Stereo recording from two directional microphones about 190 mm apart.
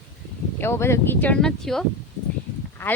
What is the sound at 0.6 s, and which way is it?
A woman's voice, 15° left (ahead or behind).